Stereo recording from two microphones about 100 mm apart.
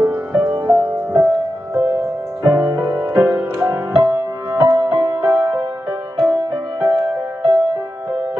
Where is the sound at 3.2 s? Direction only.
20° right (ahead or behind).